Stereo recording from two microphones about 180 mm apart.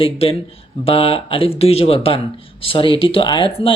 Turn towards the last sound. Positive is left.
turn(degrees=25)  # may be behind; listen again after turning